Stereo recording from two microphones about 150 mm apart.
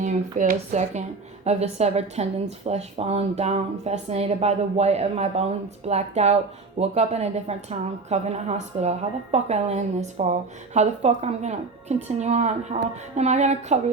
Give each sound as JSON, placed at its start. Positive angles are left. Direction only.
{"t": 0.0, "sound": "speech", "side_deg": -55}